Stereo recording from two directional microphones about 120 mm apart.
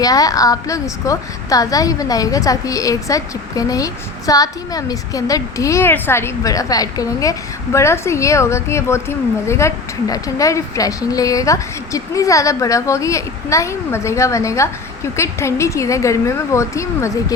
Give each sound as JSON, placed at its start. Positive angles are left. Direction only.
{"t": 0.0, "sound": "a woman's voice", "side_deg": 30}